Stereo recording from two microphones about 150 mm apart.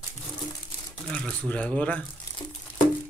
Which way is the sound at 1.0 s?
5° left (ahead or behind).